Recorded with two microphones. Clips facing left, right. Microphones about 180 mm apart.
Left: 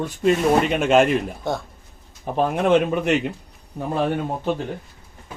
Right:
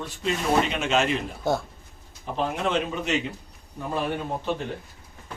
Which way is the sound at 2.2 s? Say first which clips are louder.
Left 6 dB; 55° left (ahead or behind).